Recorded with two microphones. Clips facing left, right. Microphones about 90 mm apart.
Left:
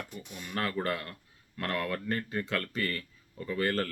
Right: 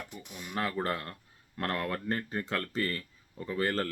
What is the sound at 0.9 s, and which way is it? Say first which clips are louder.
Speech: even; 30° right (ahead or behind).